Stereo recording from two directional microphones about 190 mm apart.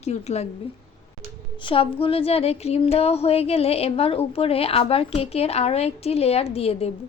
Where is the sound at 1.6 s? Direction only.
30° left (ahead or behind).